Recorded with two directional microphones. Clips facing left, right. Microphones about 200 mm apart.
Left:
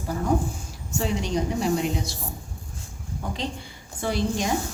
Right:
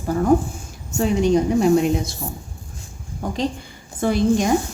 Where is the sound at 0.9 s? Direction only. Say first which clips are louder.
Right 8 dB; 50° right (ahead or behind).